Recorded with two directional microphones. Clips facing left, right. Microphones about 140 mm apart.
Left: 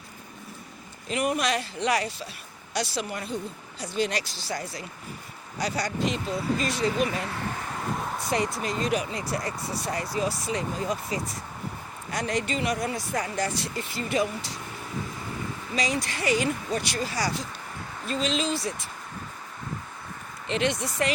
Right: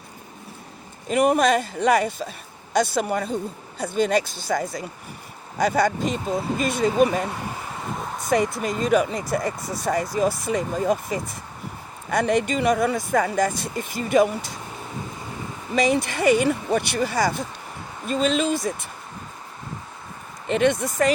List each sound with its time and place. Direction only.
1.1 s speech: 50° right (ahead or behind)
12.1 s speech: 55° right (ahead or behind)
15.7 s speech: 55° right (ahead or behind)
20.5 s speech: 50° right (ahead or behind)